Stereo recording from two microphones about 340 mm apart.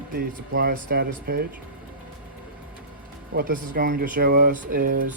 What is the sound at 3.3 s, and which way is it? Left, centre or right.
Speech, right.